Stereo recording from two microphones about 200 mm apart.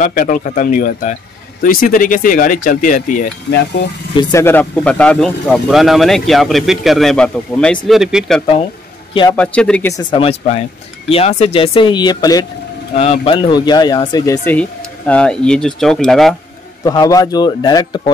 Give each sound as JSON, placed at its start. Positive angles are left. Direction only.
{"t": 0.0, "sound": "speech", "side_deg": 45}
{"t": 3.4, "sound": "speech", "side_deg": 55}
{"t": 4.2, "sound": "speech", "side_deg": 15}
{"t": 9.1, "sound": "a man's voice", "side_deg": 25}
{"t": 9.4, "sound": "speech", "side_deg": 5}
{"t": 10.1, "sound": "speech", "side_deg": 30}
{"t": 12.9, "sound": "speech", "side_deg": 30}
{"t": 16.8, "sound": "speech", "side_deg": 20}